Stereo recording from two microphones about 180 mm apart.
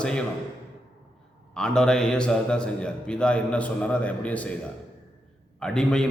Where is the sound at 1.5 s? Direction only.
5° left (ahead or behind).